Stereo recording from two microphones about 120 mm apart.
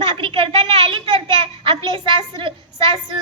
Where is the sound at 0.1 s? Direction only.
45° right (ahead or behind).